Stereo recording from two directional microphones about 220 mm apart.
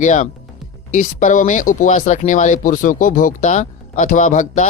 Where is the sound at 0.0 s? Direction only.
35° left (ahead or behind).